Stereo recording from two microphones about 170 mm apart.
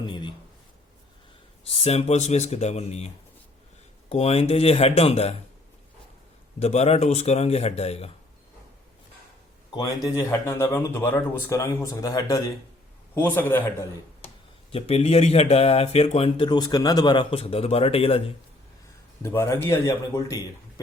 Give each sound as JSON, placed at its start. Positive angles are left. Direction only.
{"t": 0.0, "sound": "a sound", "side_deg": 25}
{"t": 1.6, "sound": "speech", "side_deg": 40}
{"t": 4.1, "sound": "speech", "side_deg": 35}
{"t": 6.6, "sound": "speech", "side_deg": 40}
{"t": 9.7, "sound": "speech", "side_deg": 20}
{"t": 14.7, "sound": "speech", "side_deg": 35}
{"t": 19.2, "sound": "speech", "side_deg": 15}